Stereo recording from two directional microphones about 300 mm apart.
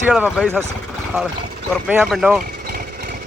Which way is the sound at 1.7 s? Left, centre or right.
Centre.